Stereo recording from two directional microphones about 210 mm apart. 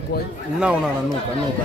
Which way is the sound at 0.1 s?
50° left (ahead or behind).